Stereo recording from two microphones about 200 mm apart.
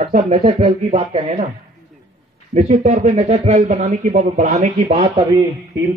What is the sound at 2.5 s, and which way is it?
Speech, 35° right (ahead or behind).